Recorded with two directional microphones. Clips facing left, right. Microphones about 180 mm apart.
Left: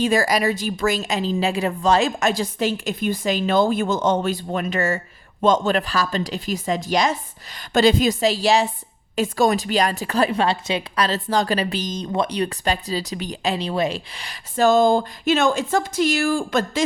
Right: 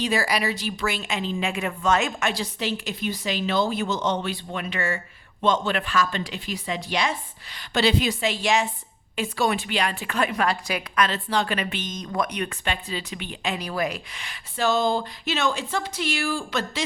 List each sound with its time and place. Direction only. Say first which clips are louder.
0.0 s a woman's voice: left 5 dB; 45° left (ahead or behind)